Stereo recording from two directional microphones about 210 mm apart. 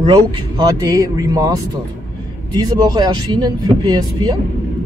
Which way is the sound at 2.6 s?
20° right (ahead or behind).